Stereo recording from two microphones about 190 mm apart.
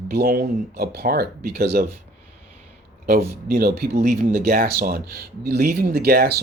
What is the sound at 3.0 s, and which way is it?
Speech, 50° right (ahead or behind).